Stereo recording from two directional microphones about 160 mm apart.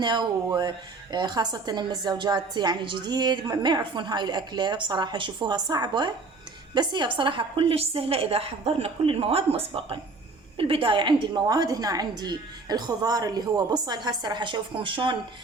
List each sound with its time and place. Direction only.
0.0 s a woman's voice: 30° right (ahead or behind)